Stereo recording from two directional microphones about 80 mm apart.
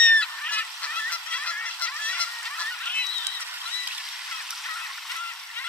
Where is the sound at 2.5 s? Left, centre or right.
Centre.